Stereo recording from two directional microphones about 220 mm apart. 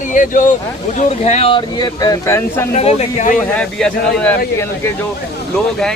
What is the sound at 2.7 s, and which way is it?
Speech, 30° left (ahead or behind).